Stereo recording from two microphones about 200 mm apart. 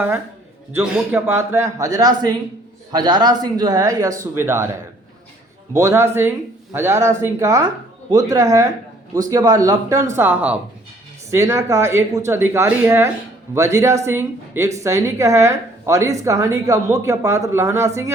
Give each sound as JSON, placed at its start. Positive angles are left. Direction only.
{"t": 0.7, "sound": "speech", "side_deg": -10}
{"t": 5.7, "sound": "speech", "side_deg": -15}